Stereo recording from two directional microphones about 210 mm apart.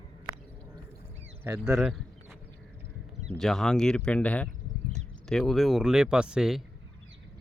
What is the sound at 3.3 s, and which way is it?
Speech, centre (ahead or behind).